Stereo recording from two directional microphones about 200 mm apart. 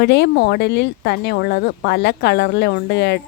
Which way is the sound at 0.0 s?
60° left (ahead or behind).